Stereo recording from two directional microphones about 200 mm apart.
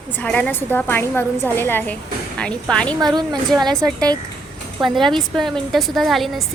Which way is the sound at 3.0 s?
20° right (ahead or behind).